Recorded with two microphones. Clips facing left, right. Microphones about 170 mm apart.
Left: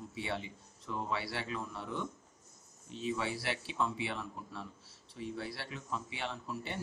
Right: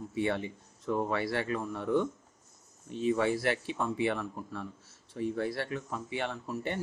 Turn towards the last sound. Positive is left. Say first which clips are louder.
# right 6 dB
turn(degrees=-50)  # may be behind; listen again after turning